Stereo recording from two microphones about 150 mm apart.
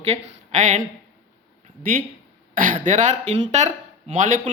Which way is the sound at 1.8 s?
70° right (ahead or behind).